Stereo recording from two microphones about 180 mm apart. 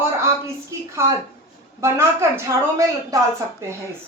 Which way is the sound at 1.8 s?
15° right (ahead or behind).